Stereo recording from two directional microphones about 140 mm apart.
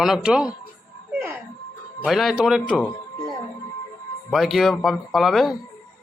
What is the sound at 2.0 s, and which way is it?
Speech, centre (ahead or behind).